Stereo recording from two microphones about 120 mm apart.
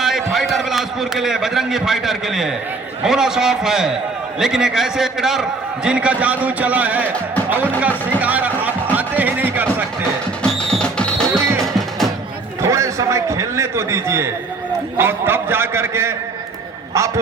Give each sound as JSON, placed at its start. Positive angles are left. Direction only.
{"t": 0.0, "sound": "a man's voice", "side_deg": 0}
{"t": 8.2, "sound": "music", "side_deg": -15}
{"t": 10.4, "sound": "music", "side_deg": 5}
{"t": 12.6, "sound": "a sound", "side_deg": -25}
{"t": 14.9, "sound": "a man's voice", "side_deg": -20}